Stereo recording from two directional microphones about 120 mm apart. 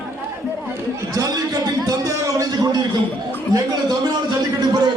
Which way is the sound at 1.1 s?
30° right (ahead or behind).